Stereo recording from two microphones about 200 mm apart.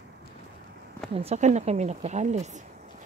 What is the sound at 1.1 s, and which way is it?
Speech, 35° right (ahead or behind).